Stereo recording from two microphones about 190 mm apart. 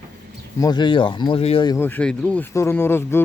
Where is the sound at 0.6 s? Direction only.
20° left (ahead or behind).